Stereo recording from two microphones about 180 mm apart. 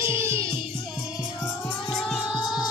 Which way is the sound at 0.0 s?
15° right (ahead or behind).